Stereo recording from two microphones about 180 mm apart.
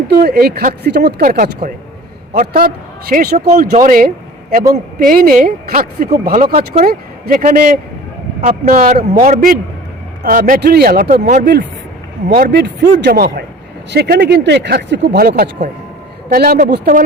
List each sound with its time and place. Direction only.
0.1 s a man's voice: 60° right (ahead or behind)
3.6 s a man's voice: 45° right (ahead or behind)
12.3 s speech: 60° right (ahead or behind)